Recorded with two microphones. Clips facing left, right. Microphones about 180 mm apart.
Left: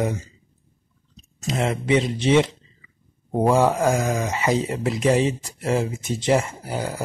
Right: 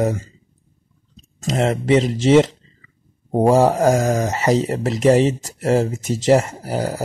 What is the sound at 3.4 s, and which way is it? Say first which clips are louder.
Speech: right 4 dB; 40° right (ahead or behind).